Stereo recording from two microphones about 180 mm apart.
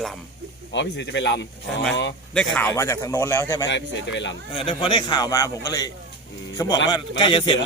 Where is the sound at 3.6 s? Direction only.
85° left.